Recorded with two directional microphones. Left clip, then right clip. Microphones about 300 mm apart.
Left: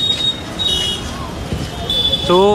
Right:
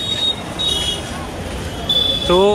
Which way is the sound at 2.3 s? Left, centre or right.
Centre.